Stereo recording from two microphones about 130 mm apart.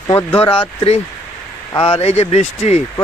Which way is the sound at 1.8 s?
50° left (ahead or behind).